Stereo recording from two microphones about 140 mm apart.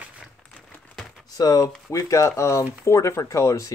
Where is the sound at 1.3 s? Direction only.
25° left (ahead or behind).